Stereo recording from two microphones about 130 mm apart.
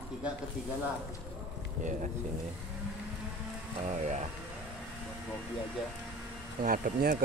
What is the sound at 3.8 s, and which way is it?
Speech, 65° right (ahead or behind).